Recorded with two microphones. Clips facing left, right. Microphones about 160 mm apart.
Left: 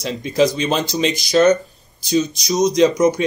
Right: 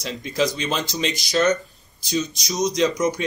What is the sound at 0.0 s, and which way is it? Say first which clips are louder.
Speech: left 6 dB; 20° left (ahead or behind).